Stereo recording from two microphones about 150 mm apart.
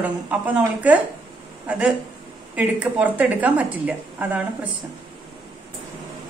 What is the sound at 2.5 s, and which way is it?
A woman's voice, 10° right (ahead or behind).